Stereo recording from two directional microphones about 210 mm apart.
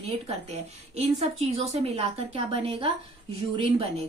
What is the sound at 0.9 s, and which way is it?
Speech, 30° right (ahead or behind).